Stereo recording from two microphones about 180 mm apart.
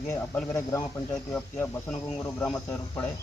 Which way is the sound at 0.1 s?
15° left (ahead or behind).